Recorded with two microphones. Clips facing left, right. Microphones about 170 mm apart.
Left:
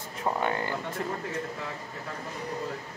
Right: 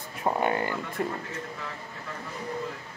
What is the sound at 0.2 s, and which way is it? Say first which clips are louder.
Speech: right 3 dB; 15° right (ahead or behind).